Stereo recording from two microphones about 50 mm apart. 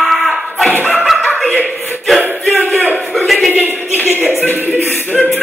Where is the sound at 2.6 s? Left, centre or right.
Right.